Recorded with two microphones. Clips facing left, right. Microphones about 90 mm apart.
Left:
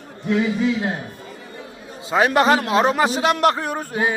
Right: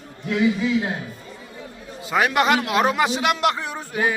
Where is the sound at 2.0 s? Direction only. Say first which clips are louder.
Left 3 dB; 30° left (ahead or behind).